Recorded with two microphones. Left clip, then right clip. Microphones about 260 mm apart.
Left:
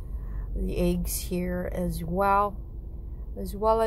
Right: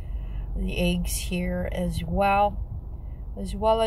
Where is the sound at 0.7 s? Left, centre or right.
Left.